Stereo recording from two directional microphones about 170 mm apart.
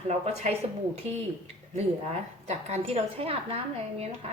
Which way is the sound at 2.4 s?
40° right (ahead or behind).